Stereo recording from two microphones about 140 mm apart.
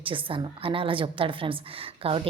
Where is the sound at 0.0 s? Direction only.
40° right (ahead or behind).